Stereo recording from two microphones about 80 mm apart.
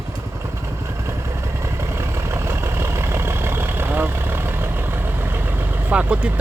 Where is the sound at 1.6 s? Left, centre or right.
Right.